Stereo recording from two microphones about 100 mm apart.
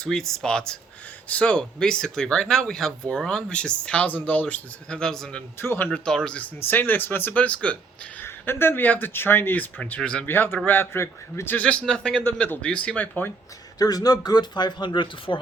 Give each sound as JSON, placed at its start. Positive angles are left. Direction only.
{"t": 0.0, "sound": "speech", "side_deg": 5}
{"t": 5.5, "sound": "speech", "side_deg": 20}
{"t": 6.1, "sound": "speech", "side_deg": 10}
{"t": 6.6, "sound": "speech", "side_deg": 20}
{"t": 8.2, "sound": "speech", "side_deg": 25}
{"t": 10.2, "sound": "speech", "side_deg": 20}
{"t": 13.7, "sound": "speech", "side_deg": 40}